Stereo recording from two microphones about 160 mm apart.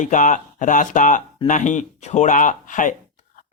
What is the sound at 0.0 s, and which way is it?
Speech, 55° left (ahead or behind).